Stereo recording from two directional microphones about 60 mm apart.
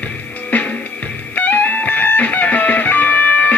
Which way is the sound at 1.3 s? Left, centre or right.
Left.